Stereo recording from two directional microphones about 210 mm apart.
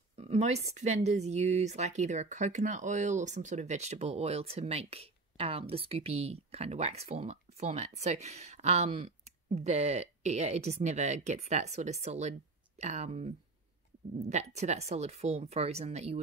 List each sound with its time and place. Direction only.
0.1 s speech: 30° right (ahead or behind)
14.3 s speech: 30° right (ahead or behind)